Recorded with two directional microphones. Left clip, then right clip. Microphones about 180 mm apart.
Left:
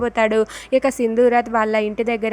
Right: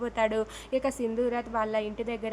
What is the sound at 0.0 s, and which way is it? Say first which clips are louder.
A woman's voice: left 10 dB; 35° left (ahead or behind).